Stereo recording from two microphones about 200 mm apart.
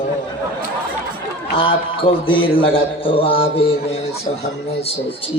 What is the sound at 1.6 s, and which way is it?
Speech, 25° left (ahead or behind).